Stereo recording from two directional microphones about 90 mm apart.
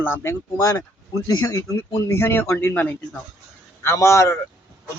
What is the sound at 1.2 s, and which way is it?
Speech, 40° left (ahead or behind).